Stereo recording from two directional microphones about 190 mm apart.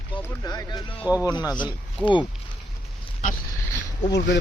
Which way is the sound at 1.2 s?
20° left (ahead or behind).